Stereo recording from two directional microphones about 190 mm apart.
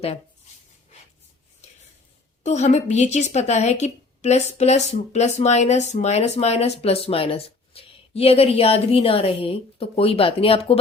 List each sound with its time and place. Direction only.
2.4 s speech: 35° left (ahead or behind)